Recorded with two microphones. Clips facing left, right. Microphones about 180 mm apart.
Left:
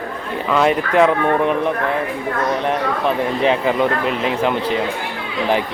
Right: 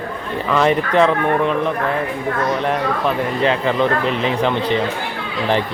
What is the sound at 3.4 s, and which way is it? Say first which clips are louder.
Speech: even; 10° left (ahead or behind).